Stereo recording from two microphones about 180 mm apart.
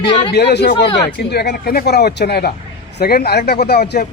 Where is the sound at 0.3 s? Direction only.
65° left (ahead or behind).